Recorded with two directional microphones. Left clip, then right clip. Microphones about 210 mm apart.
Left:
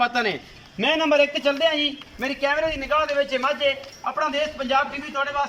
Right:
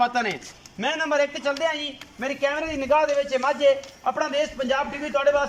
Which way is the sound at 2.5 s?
20° right (ahead or behind).